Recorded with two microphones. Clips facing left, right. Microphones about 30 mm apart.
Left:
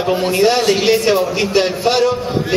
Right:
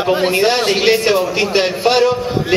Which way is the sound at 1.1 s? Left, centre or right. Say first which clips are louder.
Even; centre.